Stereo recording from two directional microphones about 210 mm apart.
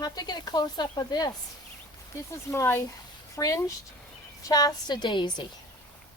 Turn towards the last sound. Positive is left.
turn(degrees=20)  # may be behind; listen again after turning